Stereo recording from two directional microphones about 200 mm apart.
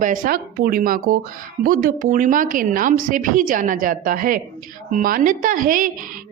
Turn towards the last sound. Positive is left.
turn(degrees=-40)  # may be behind; listen again after turning